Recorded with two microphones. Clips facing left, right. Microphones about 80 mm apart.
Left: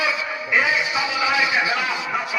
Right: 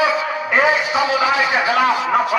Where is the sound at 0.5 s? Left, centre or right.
Right.